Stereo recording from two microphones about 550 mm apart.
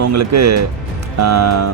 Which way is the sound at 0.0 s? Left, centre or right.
Right.